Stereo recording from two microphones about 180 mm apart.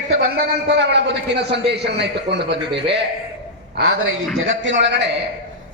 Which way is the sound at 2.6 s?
30° right (ahead or behind).